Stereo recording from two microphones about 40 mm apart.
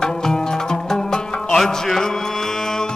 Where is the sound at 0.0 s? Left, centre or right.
Centre.